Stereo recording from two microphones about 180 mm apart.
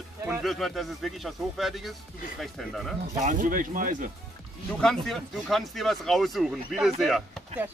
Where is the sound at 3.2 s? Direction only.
45° right (ahead or behind).